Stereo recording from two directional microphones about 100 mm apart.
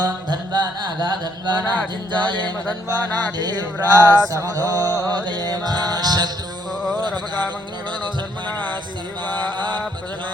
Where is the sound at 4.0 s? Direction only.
35° right (ahead or behind).